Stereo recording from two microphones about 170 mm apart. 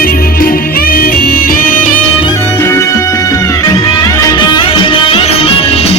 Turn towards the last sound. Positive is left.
turn(degrees=35)  # may be behind; listen again after turning